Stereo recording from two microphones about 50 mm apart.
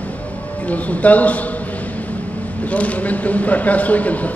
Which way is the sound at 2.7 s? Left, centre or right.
Left.